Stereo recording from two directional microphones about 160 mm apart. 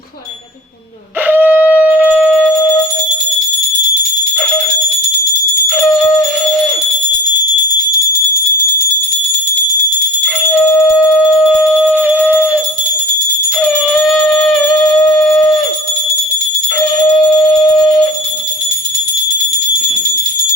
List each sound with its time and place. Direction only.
1.3 s shofar: 10° right (ahead or behind)
5.6 s music: centre (ahead or behind)
10.8 s alarm clock: centre (ahead or behind)
13.6 s music: centre (ahead or behind)
17.1 s alarm: 5° left (ahead or behind)